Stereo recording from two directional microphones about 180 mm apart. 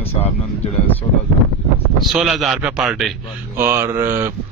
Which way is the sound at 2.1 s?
Centre (ahead or behind).